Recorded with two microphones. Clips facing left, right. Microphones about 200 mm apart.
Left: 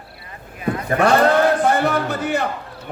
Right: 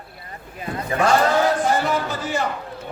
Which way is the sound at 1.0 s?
60° left (ahead or behind).